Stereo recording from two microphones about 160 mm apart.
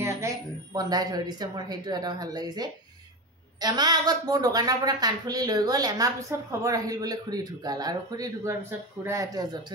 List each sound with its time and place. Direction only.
0.0 s speech: 20° right (ahead or behind)